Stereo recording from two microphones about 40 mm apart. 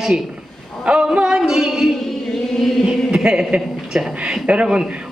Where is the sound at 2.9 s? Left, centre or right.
Centre.